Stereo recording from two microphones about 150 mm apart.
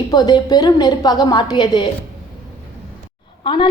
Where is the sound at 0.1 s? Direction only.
25° left (ahead or behind).